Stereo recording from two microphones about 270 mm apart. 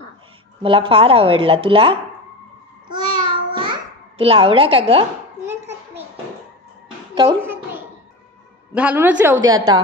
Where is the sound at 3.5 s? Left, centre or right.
Centre.